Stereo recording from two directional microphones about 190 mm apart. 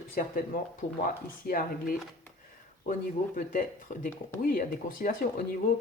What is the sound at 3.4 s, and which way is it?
Speech, 40° left (ahead or behind).